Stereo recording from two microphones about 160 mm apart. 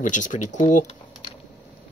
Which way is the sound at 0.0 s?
50° left (ahead or behind).